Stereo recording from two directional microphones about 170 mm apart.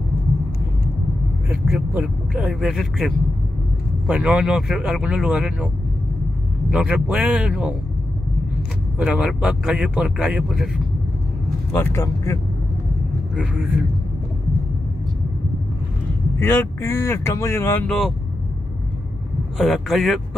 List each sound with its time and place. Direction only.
1.5 s speech: 10° right (ahead or behind)
6.7 s speech: 5° right (ahead or behind)
8.9 s speech: 5° right (ahead or behind)
11.7 s speech: 15° left (ahead or behind)
13.4 s speech: 5° right (ahead or behind)
16.3 s speech: 15° left (ahead or behind)
19.6 s speech: centre (ahead or behind)